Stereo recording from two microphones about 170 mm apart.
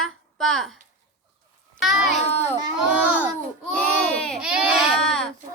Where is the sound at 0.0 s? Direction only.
Centre (ahead or behind).